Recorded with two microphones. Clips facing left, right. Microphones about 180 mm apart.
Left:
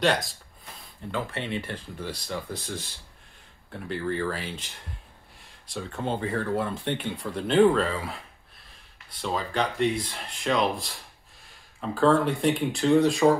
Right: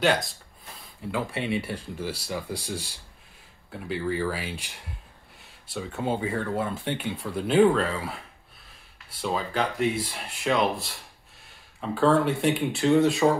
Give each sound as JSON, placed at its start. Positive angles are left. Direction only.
{"t": 0.0, "sound": "speech", "side_deg": 0}
{"t": 9.2, "sound": "speech", "side_deg": -5}